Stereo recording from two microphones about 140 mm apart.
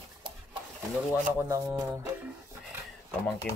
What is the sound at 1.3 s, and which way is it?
Speech, 20° right (ahead or behind).